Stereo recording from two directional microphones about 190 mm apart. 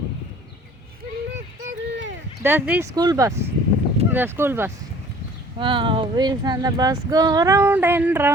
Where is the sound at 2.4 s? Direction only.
10° right (ahead or behind).